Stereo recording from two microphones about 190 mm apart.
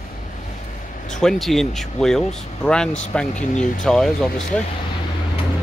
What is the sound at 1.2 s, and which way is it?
Speech, centre (ahead or behind).